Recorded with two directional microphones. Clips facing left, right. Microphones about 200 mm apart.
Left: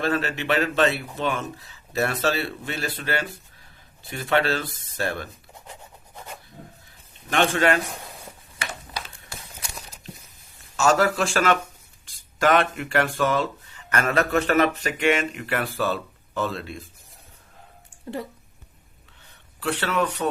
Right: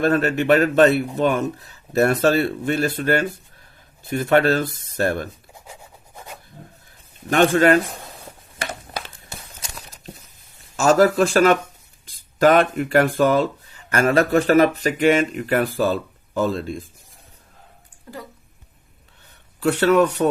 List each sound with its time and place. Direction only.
0.0 s speech: 45° right (ahead or behind)
6.1 s filing: 5° right (ahead or behind)
7.3 s speech: 45° right (ahead or behind)
8.6 s a sound: 50° right (ahead or behind)
10.8 s speech: 40° right (ahead or behind)
19.5 s speech: 45° right (ahead or behind)